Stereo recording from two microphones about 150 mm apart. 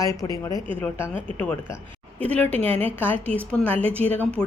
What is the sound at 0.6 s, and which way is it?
Speech, 10° left (ahead or behind).